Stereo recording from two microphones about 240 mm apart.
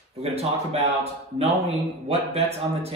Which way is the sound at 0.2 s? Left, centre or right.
Right.